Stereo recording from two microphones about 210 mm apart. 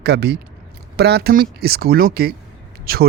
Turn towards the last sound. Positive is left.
turn(degrees=-45)  # may be behind; listen again after turning